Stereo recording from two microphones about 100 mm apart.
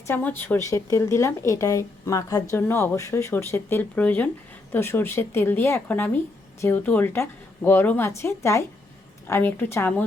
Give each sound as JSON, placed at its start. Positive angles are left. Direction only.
{"t": 0.1, "sound": "a woman's voice", "side_deg": 20}
{"t": 0.7, "sound": "speech", "side_deg": 35}
{"t": 2.6, "sound": "a woman's voice", "side_deg": 20}